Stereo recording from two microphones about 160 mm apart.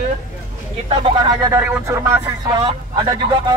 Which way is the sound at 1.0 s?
25° right (ahead or behind).